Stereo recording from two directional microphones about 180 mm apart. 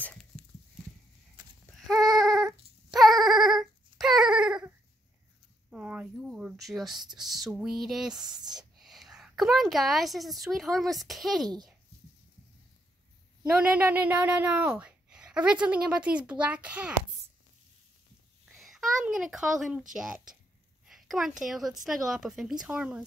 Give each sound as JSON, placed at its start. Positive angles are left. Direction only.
{"t": 1.7, "sound": "a sound", "side_deg": 0}
{"t": 7.2, "sound": "a woman's voice", "side_deg": 0}
{"t": 8.3, "sound": "speech", "side_deg": -20}
{"t": 8.7, "sound": "a woman's voice", "side_deg": 0}
{"t": 13.6, "sound": "a woman's voice", "side_deg": -10}
{"t": 18.4, "sound": "a sound", "side_deg": 0}
{"t": 19.9, "sound": "a woman's voice", "side_deg": -5}